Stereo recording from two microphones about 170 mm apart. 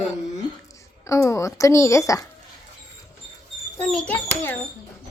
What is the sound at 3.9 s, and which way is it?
Speech, 5° left (ahead or behind).